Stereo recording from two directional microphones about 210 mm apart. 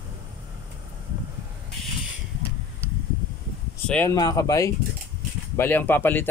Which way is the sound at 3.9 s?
10° left (ahead or behind).